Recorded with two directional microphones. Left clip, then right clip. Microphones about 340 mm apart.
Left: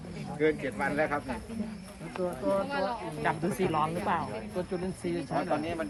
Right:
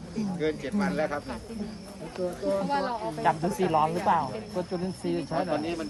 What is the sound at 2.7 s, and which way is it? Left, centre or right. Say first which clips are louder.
Speech: right 4 dB; right.